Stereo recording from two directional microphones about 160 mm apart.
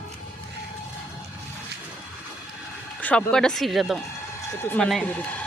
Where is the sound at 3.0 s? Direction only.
10° left (ahead or behind).